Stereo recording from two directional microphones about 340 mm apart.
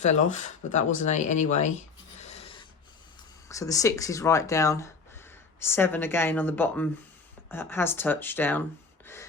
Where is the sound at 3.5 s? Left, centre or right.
Centre.